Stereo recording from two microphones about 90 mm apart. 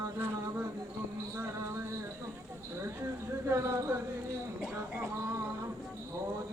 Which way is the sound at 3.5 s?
30° right (ahead or behind).